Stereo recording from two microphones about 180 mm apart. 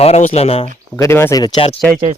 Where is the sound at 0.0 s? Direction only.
35° left (ahead or behind).